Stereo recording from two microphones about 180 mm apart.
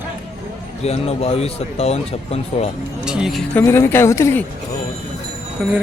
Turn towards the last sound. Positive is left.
turn(degrees=-10)  # may be behind; listen again after turning